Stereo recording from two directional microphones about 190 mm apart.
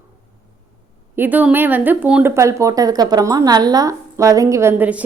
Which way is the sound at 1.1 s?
10° right (ahead or behind).